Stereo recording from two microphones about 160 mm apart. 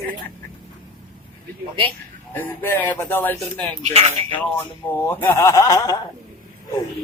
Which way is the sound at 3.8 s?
40° right (ahead or behind).